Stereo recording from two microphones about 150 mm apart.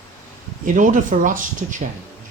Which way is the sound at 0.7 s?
60° right (ahead or behind).